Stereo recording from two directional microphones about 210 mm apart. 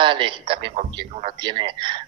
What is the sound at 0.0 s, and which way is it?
A man's voice, 25° right (ahead or behind).